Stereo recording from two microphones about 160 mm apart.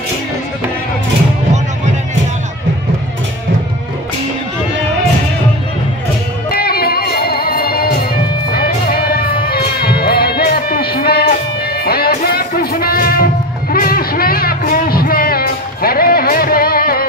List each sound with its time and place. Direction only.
6.5 s music: 70° left (ahead or behind)